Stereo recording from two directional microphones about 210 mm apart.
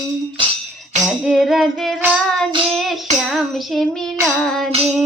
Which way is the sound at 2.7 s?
Centre (ahead or behind).